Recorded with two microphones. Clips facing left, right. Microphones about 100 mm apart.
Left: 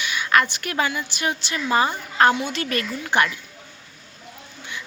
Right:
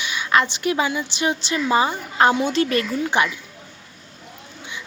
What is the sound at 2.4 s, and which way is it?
Speech, 30° right (ahead or behind).